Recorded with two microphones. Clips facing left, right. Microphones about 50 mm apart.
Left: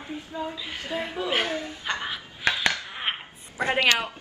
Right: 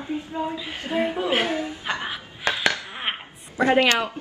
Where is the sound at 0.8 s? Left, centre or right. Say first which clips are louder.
Right 6 dB; right.